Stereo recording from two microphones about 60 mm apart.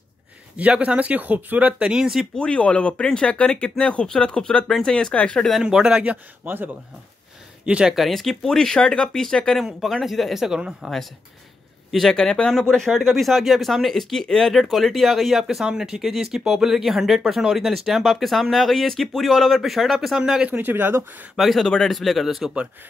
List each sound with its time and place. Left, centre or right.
0.6 s speech: right
2.3 s speech: centre
5.6 s speech: centre
6.4 s speech: right
7.6 s speech: centre
7.9 s speech: centre
9.8 s speech: centre
11.9 s speech: centre
20.2 s speech: centre
20.4 s speech: right
21.4 s speech: centre